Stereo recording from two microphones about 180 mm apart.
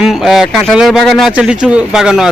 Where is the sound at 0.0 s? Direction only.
Centre (ahead or behind).